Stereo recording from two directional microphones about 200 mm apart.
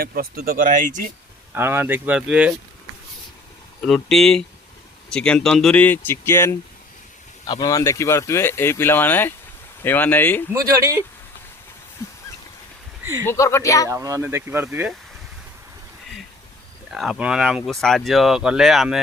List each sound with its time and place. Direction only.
0.0 s speech: 45° right (ahead or behind)
1.5 s speech: 10° right (ahead or behind)
3.8 s speech: centre (ahead or behind)
13.2 s speech: 15° left (ahead or behind)
13.8 s speech: 15° right (ahead or behind)
16.9 s speech: centre (ahead or behind)